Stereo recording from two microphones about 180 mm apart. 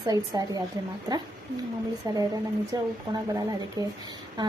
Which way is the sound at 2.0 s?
20° right (ahead or behind).